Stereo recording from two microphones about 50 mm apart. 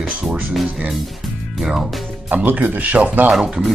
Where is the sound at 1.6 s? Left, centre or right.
Centre.